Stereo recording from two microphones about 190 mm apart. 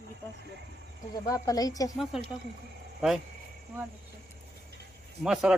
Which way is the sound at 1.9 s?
Centre (ahead or behind).